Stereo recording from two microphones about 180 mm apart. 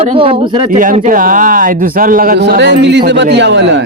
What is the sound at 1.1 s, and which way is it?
A man's voice, 50° right (ahead or behind).